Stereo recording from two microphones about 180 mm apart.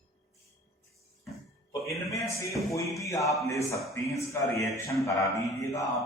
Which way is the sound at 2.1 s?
15° left (ahead or behind).